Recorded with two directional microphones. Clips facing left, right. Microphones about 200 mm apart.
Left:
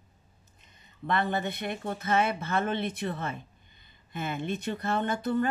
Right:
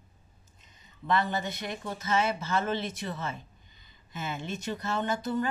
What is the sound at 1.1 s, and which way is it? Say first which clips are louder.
Speech: even; 55° left (ahead or behind).